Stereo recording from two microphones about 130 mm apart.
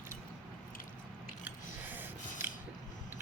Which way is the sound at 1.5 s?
15° right (ahead or behind).